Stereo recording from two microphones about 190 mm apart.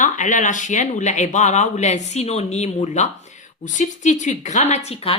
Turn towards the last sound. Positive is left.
turn(degrees=30)  # may be behind; listen again after turning